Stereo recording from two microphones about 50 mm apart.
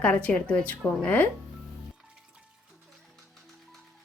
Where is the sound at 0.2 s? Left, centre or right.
Left.